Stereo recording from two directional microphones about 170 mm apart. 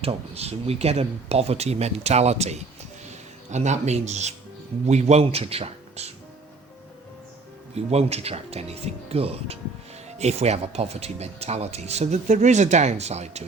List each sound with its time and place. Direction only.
0.0 s speech: 35° right (ahead or behind)
7.8 s speech: 40° right (ahead or behind)